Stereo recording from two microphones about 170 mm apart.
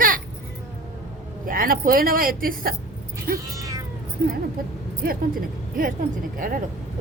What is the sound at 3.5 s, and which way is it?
Cat, 20° right (ahead or behind).